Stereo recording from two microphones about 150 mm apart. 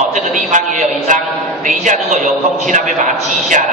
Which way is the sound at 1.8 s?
55° right (ahead or behind).